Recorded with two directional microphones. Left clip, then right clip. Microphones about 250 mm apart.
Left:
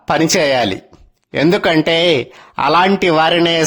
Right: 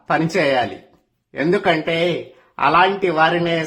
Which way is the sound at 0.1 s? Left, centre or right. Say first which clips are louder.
Left 4 dB; left.